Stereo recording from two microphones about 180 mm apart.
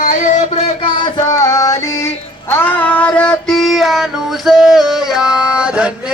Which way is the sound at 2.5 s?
10° left (ahead or behind).